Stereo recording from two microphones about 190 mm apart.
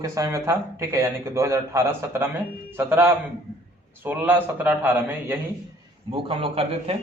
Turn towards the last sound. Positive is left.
turn(degrees=-30)  # may be behind; listen again after turning